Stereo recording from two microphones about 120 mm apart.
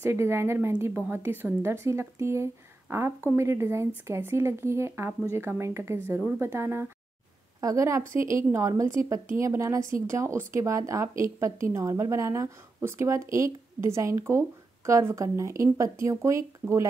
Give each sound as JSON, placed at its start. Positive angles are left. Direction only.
{"t": 0.0, "sound": "a woman's voice", "side_deg": -20}